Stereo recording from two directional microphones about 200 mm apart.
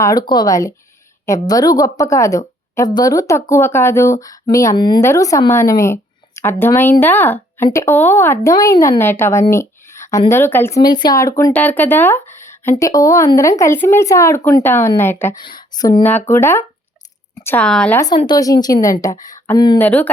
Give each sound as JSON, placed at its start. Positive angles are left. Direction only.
{"t": 0.0, "sound": "a woman's voice", "side_deg": 20}
{"t": 15.4, "sound": "speech", "side_deg": 20}
{"t": 18.0, "sound": "a woman's voice", "side_deg": 20}
{"t": 19.8, "sound": "speech", "side_deg": 10}